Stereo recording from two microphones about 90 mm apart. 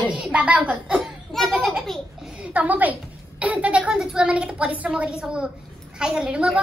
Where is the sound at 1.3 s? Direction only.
Centre (ahead or behind); by 2.9 s 15° right (ahead or behind).